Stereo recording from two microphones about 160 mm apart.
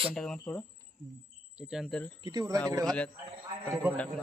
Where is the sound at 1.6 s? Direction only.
5° right (ahead or behind).